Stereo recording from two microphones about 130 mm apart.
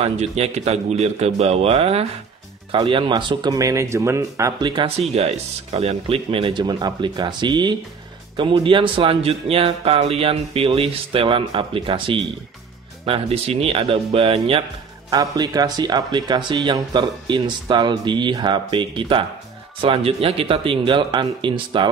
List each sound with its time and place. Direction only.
0.0 s speech: 55° right (ahead or behind); by 4.6 s 25° right (ahead or behind)
4.6 s speech: 45° right (ahead or behind)
15.0 s speech: 30° right (ahead or behind)